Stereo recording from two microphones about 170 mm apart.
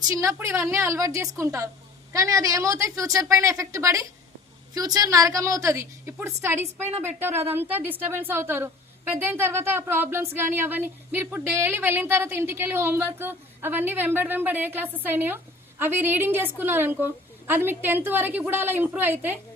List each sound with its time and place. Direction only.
0.2 s a woman's voice: 15° right (ahead or behind)